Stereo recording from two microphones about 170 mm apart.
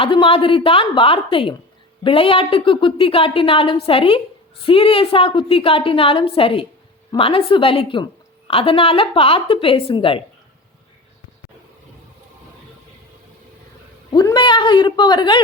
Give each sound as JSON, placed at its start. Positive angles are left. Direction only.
{"t": 0.0, "sound": "a woman's voice", "side_deg": 30}
{"t": 14.1, "sound": "a man's voice", "side_deg": 25}